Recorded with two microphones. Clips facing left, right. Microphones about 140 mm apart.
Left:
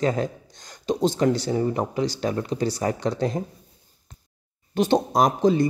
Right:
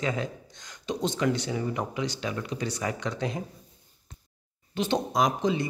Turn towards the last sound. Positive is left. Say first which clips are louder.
# left 6 dB
turn(degrees=40)  # may be behind; listen again after turning